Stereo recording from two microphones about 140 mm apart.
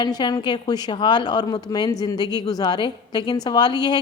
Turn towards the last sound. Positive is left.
turn(degrees=30)  # may be behind; listen again after turning